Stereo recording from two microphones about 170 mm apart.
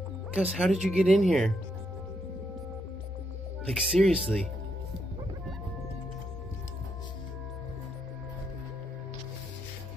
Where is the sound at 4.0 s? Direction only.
Centre (ahead or behind).